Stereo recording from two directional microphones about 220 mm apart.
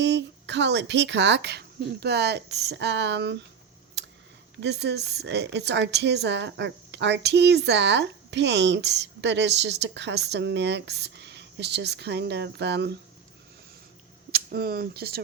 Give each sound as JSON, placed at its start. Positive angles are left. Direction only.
{"t": 0.0, "sound": "a woman's voice", "side_deg": -50}
{"t": 4.0, "sound": "a sound", "side_deg": -50}
{"t": 4.6, "sound": "a woman's voice", "side_deg": -50}
{"t": 14.3, "sound": "speech", "side_deg": -45}